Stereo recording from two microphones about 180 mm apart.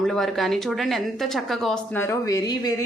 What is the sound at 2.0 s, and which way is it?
Speech, 20° left (ahead or behind).